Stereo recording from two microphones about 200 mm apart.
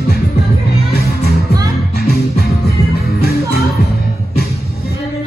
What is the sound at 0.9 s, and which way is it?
Music, 50° left (ahead or behind).